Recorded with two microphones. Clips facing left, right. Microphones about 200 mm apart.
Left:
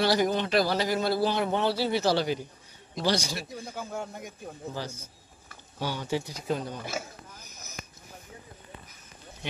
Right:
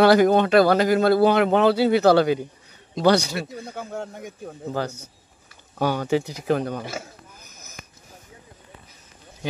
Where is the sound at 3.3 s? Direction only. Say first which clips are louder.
Right 6 dB; 65° right (ahead or behind).